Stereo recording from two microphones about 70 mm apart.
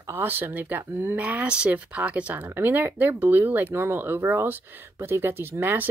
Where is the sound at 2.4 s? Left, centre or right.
Right.